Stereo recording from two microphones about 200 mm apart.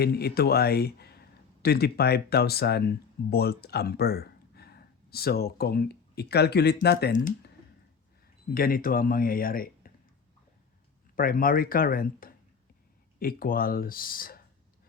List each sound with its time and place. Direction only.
0.0 s speech: 55° left (ahead or behind)
8.5 s speech: 45° left (ahead or behind)
11.1 s speech: 45° left (ahead or behind)